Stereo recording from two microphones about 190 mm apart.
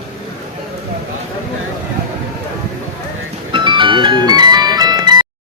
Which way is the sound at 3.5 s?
25° right (ahead or behind).